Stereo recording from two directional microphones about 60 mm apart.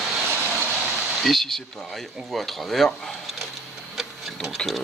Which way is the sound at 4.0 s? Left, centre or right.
Centre.